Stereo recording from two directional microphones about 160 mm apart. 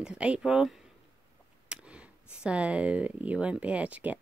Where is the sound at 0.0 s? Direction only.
5° right (ahead or behind).